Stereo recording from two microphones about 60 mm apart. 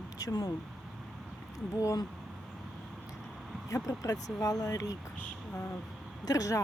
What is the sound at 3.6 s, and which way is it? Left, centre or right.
Speech, left.